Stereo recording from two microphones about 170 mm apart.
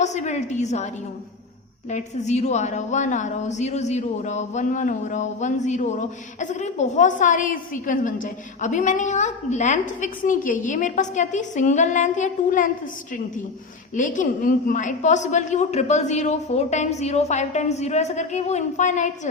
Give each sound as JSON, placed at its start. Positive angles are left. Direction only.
{"t": 0.0, "sound": "a woman's voice", "side_deg": 45}
{"t": 1.9, "sound": "a woman's voice", "side_deg": 45}
{"t": 13.9, "sound": "a woman's voice", "side_deg": 50}